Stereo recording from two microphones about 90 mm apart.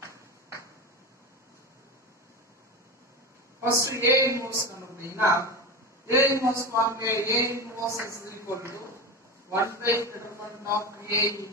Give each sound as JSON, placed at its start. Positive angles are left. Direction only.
{"t": 3.7, "sound": "a man's voice", "side_deg": -35}